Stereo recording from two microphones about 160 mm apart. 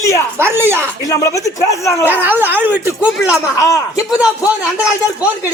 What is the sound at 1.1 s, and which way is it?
A man's voice, 20° left (ahead or behind).